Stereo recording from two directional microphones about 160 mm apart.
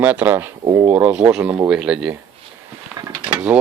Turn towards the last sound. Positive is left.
turn(degrees=-5)  # may be behind; listen again after turning